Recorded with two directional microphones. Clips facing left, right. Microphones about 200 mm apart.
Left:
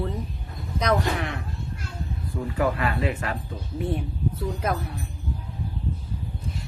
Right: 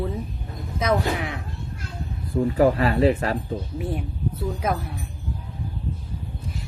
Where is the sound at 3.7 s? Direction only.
Centre (ahead or behind).